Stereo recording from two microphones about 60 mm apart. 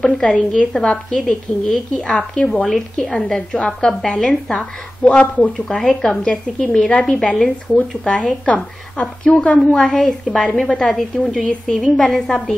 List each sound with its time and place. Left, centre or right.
0.0 s a woman's voice: centre
5.7 s a woman's voice: centre
9.6 s a woman's voice: centre